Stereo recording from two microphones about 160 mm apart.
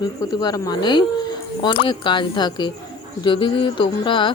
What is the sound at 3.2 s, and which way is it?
Music, 30° left (ahead or behind).